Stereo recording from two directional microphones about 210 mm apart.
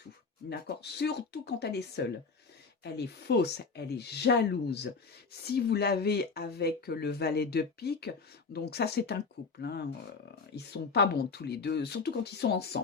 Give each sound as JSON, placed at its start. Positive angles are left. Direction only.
{"t": 0.5, "sound": "speech", "side_deg": 50}